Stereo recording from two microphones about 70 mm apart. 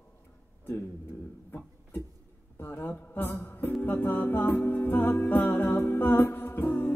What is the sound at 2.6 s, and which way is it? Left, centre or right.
Music, left.